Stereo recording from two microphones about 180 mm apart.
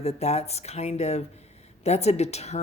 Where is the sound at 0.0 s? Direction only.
35° left (ahead or behind).